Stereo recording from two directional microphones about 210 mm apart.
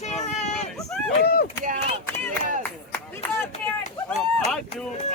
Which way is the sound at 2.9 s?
10° left (ahead or behind).